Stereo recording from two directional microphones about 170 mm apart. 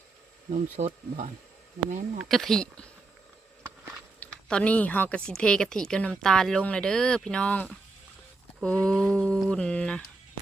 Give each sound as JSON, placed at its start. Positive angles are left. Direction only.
{"t": 0.5, "sound": "speech", "side_deg": -40}
{"t": 2.1, "sound": "a woman's voice", "side_deg": 0}
{"t": 4.2, "sound": "a woman's voice", "side_deg": 5}